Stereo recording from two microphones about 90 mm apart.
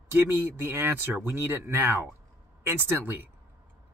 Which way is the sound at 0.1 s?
25° right (ahead or behind).